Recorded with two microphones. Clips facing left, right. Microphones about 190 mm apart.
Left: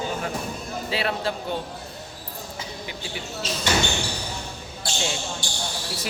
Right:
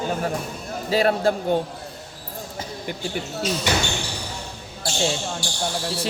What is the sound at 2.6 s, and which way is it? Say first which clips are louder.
Speech: right 6 dB; 50° right (ahead or behind).